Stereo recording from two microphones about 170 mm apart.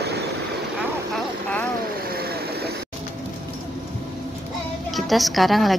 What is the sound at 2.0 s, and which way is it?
Vehicle, 65° right (ahead or behind).